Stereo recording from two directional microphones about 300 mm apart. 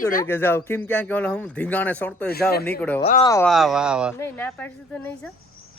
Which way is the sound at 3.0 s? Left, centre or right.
Centre.